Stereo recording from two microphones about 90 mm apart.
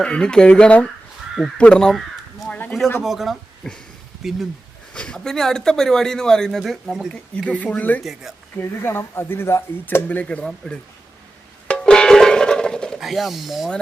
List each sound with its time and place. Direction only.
0.0 s speech: 10° left (ahead or behind)
2.5 s a sound: 15° left (ahead or behind)
3.0 s speech: 5° right (ahead or behind)
4.9 s speech: 10° left (ahead or behind)
7.1 s speech: 10° left (ahead or behind)
8.0 s speech: 5° right (ahead or behind)
8.5 s speech: 25° left (ahead or behind)
11.7 s music: 10° left (ahead or behind)
13.0 s speech: centre (ahead or behind)